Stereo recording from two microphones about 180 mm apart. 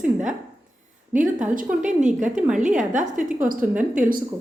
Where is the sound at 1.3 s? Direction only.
45° right (ahead or behind).